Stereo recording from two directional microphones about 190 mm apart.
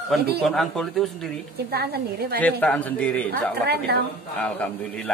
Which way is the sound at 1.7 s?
55° right (ahead or behind).